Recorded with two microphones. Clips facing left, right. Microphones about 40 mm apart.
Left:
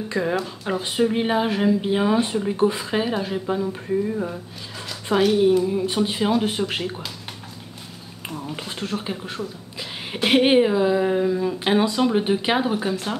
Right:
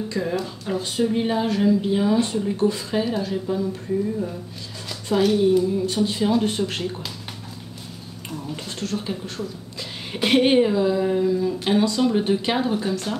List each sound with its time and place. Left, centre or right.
0.1 s speech: left
5.1 s speech: left
8.4 s speech: left